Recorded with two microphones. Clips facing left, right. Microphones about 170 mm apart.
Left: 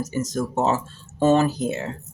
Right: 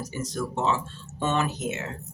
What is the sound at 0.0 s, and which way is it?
Speech, 45° left (ahead or behind).